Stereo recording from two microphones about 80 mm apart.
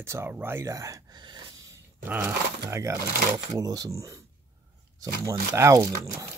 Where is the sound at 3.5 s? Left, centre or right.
Right.